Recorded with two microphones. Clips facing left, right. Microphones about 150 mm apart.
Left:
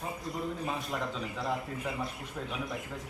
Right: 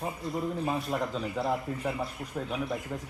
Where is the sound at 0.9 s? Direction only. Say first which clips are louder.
Right 4 dB; 30° right (ahead or behind).